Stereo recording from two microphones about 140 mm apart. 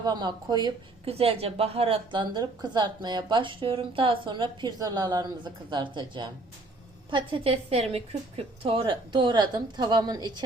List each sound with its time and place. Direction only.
0.0 s a woman's voice: 30° right (ahead or behind)
1.0 s a woman's voice: 45° right (ahead or behind)